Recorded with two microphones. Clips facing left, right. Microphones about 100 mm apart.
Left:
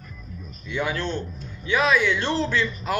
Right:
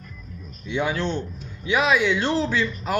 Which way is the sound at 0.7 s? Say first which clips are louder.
Right 2 dB; 20° right (ahead or behind).